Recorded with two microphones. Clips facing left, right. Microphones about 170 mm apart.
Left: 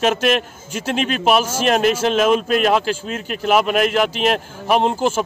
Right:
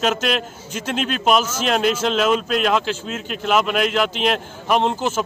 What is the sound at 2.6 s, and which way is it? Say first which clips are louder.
A man's voice: left 3 dB; 5° left (ahead or behind).